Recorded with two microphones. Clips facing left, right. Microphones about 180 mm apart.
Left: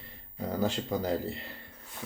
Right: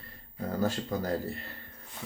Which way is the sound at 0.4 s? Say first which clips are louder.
Even; 15° left (ahead or behind).